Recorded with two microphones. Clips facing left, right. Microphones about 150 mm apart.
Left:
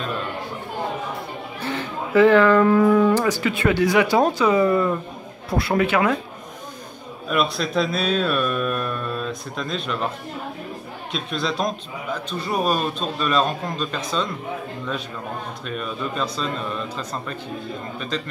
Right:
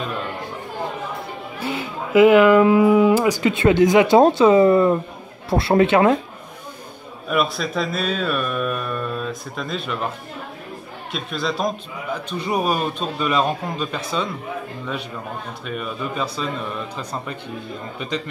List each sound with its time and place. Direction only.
1.6 s speech: 10° right (ahead or behind)
7.2 s speech: 5° right (ahead or behind)
11.1 s speech: 5° right (ahead or behind)
15.6 s speech: 10° right (ahead or behind)